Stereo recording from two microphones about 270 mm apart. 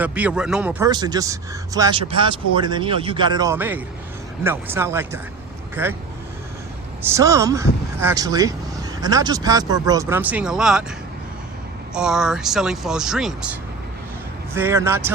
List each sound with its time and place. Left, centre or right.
0.0 s speech: centre
7.1 s speech: centre
11.9 s speech: centre